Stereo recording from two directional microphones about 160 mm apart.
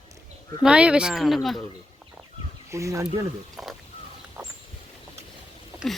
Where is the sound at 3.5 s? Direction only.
Centre (ahead or behind).